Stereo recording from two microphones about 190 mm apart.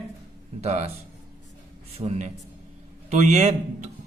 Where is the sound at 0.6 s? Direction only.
35° right (ahead or behind).